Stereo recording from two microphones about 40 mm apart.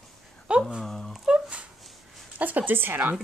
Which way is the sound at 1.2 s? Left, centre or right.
Right.